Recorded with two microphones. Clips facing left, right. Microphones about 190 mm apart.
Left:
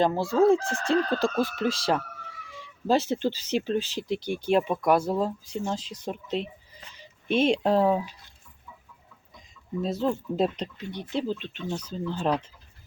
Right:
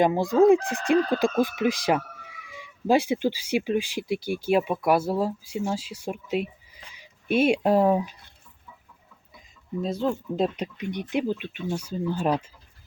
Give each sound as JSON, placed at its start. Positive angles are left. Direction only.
{"t": 0.0, "sound": "speech", "side_deg": -15}
{"t": 9.8, "sound": "speech", "side_deg": 0}
{"t": 10.8, "sound": "speech", "side_deg": -15}